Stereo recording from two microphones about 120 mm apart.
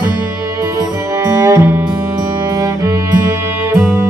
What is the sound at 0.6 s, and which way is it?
Music, 25° right (ahead or behind).